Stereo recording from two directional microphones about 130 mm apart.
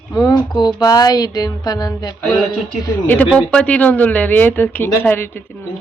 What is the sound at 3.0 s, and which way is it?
Speech, 10° left (ahead or behind).